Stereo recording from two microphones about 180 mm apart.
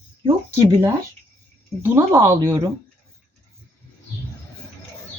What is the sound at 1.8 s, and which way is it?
Speech, 15° right (ahead or behind).